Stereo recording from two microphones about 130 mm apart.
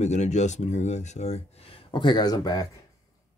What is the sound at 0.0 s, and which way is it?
Speech, 60° left (ahead or behind).